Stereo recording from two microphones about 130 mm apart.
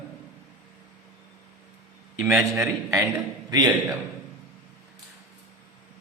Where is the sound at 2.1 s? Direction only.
5° right (ahead or behind).